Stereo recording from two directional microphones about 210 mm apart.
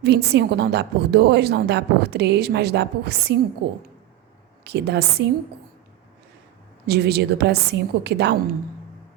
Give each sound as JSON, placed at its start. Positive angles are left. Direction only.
{"t": 0.0, "sound": "a woman's voice", "side_deg": -50}
{"t": 4.6, "sound": "a woman's voice", "side_deg": -50}
{"t": 6.8, "sound": "a woman's voice", "side_deg": -50}